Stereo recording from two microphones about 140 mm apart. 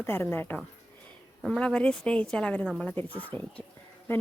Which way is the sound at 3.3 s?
15° left (ahead or behind).